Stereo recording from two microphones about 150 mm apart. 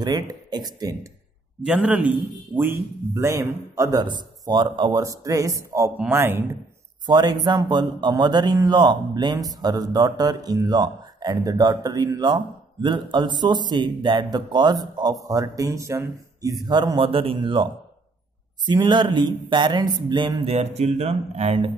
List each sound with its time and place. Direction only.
0.0 s a man's voice: 30° right (ahead or behind)
1.6 s a man's voice: 5° right (ahead or behind)
3.2 s a man's voice: 20° right (ahead or behind)
5.0 s a man's voice: 20° right (ahead or behind)
7.1 s a man's voice: 30° right (ahead or behind)
18.7 s speech: 30° right (ahead or behind)